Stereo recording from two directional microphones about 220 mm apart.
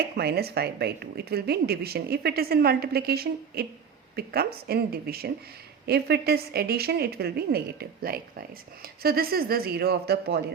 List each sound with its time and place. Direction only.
0.0 s speech: 45° right (ahead or behind)